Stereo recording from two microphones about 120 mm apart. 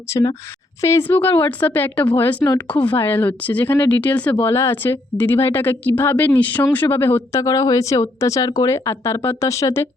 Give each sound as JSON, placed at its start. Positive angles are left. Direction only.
{"t": 0.1, "sound": "speech", "side_deg": 30}